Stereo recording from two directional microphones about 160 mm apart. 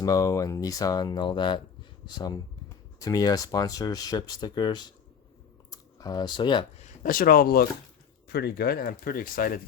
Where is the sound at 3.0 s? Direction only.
25° left (ahead or behind).